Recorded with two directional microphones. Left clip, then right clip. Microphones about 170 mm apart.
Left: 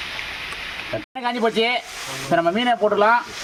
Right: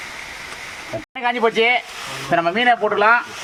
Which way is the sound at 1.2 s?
90° left.